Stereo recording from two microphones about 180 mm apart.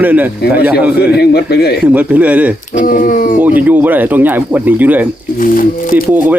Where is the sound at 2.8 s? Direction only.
50° left (ahead or behind).